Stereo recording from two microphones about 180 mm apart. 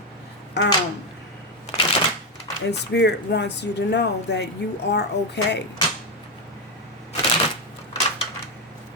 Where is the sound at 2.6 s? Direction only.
70° left (ahead or behind).